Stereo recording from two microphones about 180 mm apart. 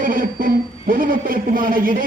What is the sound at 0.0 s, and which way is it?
A man's voice, 50° right (ahead or behind).